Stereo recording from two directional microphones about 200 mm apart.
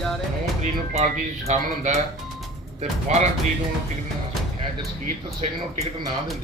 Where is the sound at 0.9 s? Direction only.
35° right (ahead or behind).